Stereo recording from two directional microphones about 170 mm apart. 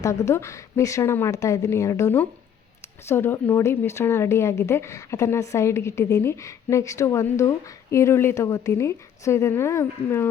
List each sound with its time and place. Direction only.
0.0 s speech: 15° left (ahead or behind)